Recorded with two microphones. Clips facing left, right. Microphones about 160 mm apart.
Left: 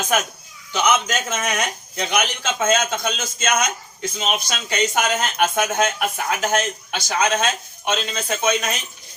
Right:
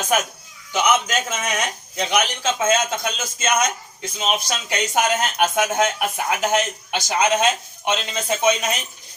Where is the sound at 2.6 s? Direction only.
10° right (ahead or behind).